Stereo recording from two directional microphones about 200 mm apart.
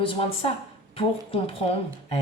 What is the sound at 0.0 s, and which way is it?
Speech, 25° left (ahead or behind).